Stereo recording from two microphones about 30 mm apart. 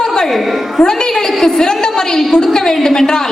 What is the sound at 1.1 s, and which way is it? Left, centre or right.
A woman's voice, centre.